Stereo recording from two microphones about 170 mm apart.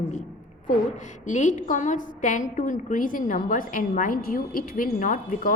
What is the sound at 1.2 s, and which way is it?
A woman's voice, 45° left (ahead or behind).